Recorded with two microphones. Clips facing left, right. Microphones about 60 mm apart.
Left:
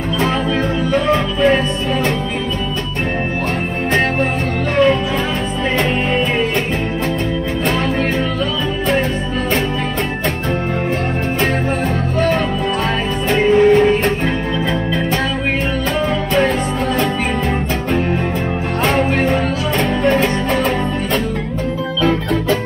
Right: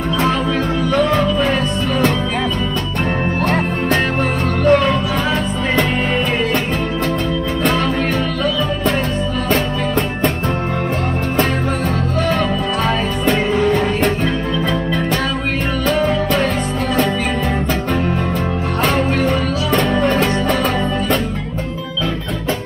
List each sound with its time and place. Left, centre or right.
0.9 s music: left
13.5 s music: left
18.9 s music: left